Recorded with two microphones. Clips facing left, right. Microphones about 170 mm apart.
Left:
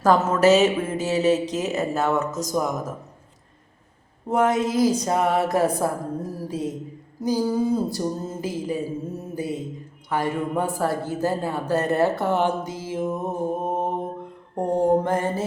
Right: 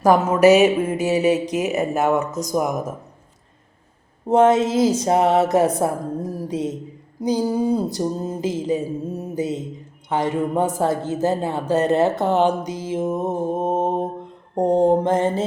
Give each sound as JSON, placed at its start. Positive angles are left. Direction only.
{"t": 0.0, "sound": "speech", "side_deg": -15}
{"t": 4.3, "sound": "speech", "side_deg": -25}